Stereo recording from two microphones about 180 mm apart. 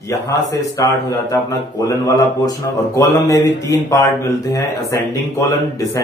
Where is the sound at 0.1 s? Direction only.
20° left (ahead or behind).